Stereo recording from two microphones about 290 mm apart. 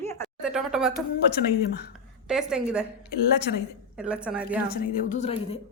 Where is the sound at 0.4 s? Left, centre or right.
Centre.